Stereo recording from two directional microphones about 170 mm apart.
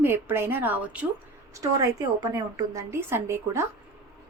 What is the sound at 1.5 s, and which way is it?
A woman's voice, 20° right (ahead or behind).